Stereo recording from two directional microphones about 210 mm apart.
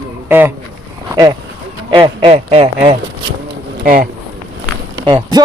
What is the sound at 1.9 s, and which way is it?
Speech, 25° right (ahead or behind).